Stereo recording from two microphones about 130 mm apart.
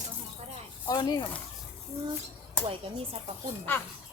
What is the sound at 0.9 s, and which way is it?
Speech, 30° left (ahead or behind).